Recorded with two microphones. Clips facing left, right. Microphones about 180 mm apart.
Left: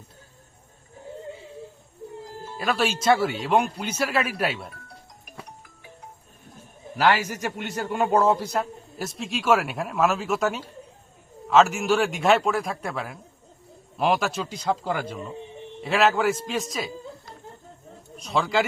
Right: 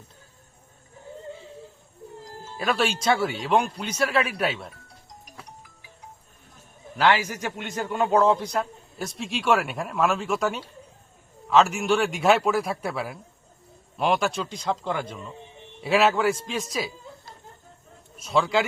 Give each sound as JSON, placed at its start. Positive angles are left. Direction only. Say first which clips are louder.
{"t": 2.6, "sound": "a man's voice", "louder": "even", "side_deg": 0}
{"t": 5.2, "sound": "music", "louder": "left 3 dB", "side_deg": 55}
{"t": 6.9, "sound": "a man's voice", "louder": "even", "side_deg": 10}
{"t": 18.2, "sound": "a man's voice", "louder": "right 1 dB", "side_deg": 0}